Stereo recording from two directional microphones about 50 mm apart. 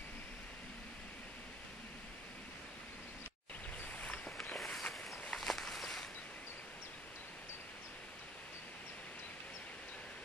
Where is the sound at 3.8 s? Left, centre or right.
Left.